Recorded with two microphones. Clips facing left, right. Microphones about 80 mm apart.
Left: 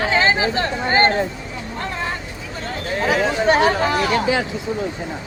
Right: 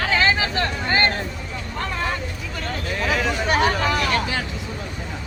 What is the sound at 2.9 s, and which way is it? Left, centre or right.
Speech, left.